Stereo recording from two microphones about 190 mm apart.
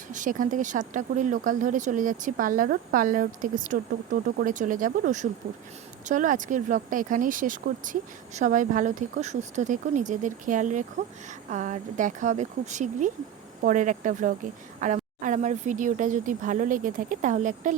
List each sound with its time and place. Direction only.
0.1 s speech: 45° right (ahead or behind)